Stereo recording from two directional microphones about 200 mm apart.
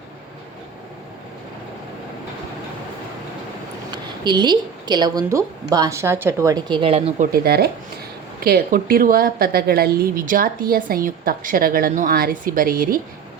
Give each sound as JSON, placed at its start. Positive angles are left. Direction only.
{"t": 3.9, "sound": "a woman's voice", "side_deg": -20}
{"t": 7.4, "sound": "a woman's voice", "side_deg": -50}